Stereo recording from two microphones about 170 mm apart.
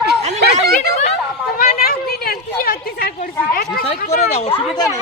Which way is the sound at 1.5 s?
65° left (ahead or behind).